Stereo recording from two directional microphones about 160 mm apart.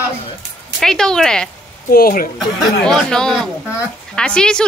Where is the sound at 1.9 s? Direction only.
65° left (ahead or behind).